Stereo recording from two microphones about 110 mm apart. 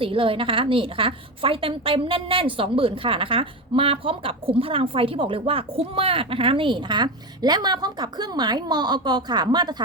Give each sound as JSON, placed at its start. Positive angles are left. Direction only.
{"t": 0.0, "sound": "a woman's voice", "side_deg": -55}